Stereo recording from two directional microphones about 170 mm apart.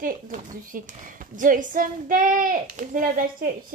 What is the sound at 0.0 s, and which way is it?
Speech, 50° right (ahead or behind).